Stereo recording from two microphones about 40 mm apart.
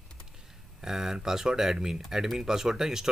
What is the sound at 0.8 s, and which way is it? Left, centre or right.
Speech, centre.